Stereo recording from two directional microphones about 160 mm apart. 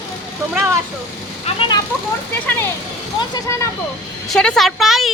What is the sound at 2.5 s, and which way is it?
Speech, 15° left (ahead or behind).